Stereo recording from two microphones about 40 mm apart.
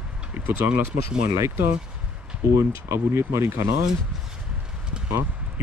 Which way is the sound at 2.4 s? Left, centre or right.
Right.